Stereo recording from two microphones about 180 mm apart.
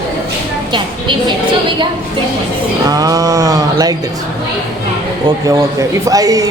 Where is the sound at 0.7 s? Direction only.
25° right (ahead or behind).